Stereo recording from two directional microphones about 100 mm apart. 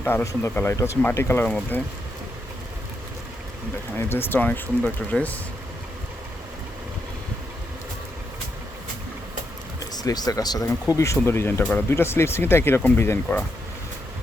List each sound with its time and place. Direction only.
0.0 s speech: 20° left (ahead or behind)
3.9 s speech: 20° left (ahead or behind)
9.9 s speech: 40° left (ahead or behind); by 13.4 s 20° left (ahead or behind)